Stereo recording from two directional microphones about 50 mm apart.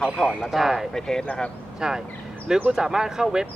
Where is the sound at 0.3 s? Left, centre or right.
Centre.